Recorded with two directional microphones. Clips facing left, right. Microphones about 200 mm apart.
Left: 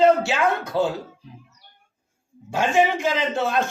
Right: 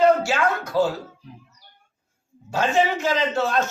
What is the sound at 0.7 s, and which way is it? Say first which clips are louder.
Speech: right 1 dB; 20° left (ahead or behind).